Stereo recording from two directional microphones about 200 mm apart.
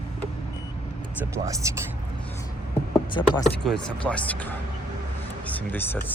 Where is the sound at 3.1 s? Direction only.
25° left (ahead or behind).